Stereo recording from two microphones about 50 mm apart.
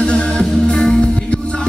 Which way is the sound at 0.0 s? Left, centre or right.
Centre.